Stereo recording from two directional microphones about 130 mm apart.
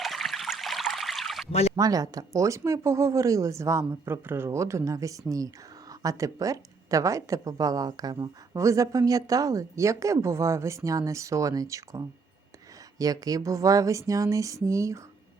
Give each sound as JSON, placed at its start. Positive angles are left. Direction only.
{"t": 0.0, "sound": "stream", "side_deg": 0}
{"t": 1.7, "sound": "a woman's voice", "side_deg": -30}